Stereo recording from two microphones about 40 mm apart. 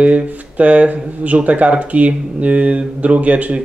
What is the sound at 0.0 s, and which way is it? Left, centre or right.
Speech, right.